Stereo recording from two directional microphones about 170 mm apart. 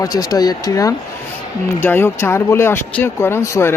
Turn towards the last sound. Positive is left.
turn(degrees=15)  # may be behind; listen again after turning